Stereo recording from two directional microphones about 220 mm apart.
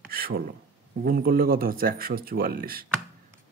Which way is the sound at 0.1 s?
45° right (ahead or behind).